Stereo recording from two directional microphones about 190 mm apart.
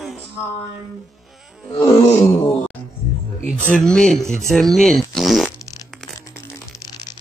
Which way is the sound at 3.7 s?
5° left (ahead or behind).